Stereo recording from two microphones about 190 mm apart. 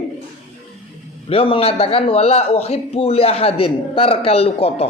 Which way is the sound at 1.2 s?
30° left (ahead or behind).